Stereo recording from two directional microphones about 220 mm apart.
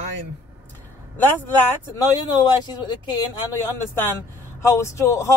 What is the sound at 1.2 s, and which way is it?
Speech, 10° left (ahead or behind).